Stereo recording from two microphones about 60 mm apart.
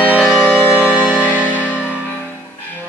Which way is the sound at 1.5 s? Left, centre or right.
Left.